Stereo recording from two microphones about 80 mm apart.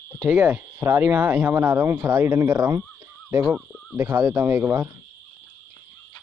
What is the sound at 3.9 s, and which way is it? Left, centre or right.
Speech, right.